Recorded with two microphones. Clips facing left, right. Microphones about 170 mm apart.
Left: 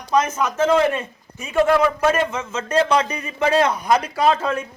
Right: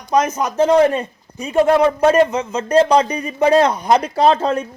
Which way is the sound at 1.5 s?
25° right (ahead or behind).